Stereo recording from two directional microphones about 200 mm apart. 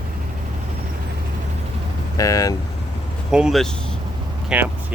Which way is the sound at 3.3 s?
Centre (ahead or behind).